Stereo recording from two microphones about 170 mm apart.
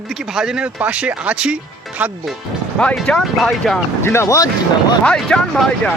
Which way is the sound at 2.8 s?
5° left (ahead or behind).